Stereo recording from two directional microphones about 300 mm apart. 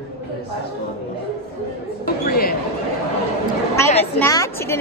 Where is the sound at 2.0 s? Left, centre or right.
Left.